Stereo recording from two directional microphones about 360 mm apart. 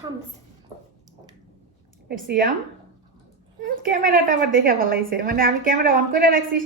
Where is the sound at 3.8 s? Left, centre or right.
Right.